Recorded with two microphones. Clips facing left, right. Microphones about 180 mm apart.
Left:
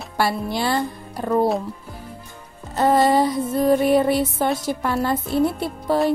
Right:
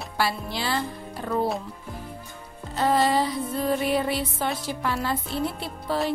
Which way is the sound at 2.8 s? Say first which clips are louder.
Left 5 dB; 50° left (ahead or behind).